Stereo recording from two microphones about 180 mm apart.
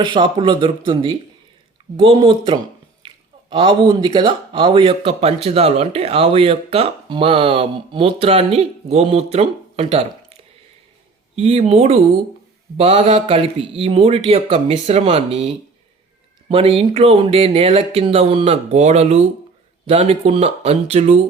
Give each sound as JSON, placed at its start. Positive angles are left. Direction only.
{"t": 0.0, "sound": "a man's voice", "side_deg": -25}
{"t": 11.3, "sound": "a man's voice", "side_deg": -35}